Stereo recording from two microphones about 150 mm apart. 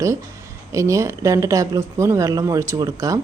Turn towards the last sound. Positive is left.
turn(degrees=-25)  # may be behind; listen again after turning